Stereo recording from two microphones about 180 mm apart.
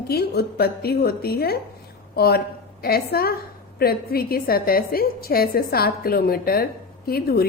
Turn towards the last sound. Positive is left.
turn(degrees=60)  # may be behind; listen again after turning